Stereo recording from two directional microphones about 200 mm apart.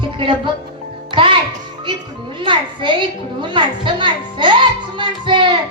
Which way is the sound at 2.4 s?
25° right (ahead or behind).